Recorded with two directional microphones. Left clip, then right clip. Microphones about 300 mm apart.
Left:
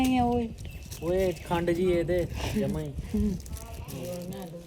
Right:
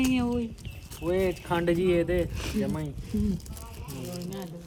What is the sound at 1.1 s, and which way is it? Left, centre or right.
Speech, right.